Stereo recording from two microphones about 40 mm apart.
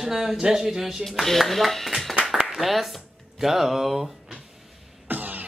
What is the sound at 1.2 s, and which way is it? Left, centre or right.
Mantra, centre.